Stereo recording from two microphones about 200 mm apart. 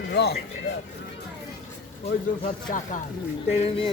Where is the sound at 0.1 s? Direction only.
55° left (ahead or behind).